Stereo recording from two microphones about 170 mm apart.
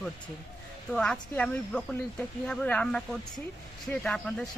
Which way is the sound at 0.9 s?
5° left (ahead or behind).